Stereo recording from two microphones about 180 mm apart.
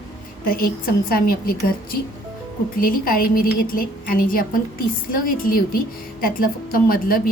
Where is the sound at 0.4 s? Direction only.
55° left (ahead or behind).